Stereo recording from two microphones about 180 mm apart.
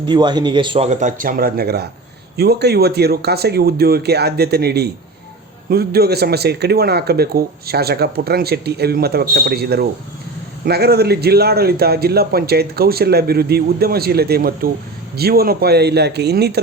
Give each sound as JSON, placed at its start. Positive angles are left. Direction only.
{"t": 0.0, "sound": "speech", "side_deg": -25}
{"t": 0.9, "sound": "speech", "side_deg": -40}